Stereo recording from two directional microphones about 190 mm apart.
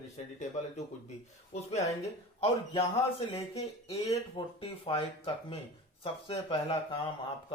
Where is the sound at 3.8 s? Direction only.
30° left (ahead or behind).